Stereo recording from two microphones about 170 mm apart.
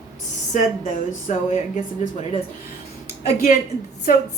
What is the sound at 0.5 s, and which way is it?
Speech, 45° left (ahead or behind).